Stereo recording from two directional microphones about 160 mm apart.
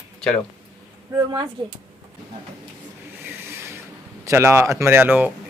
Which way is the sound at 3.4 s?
15° right (ahead or behind).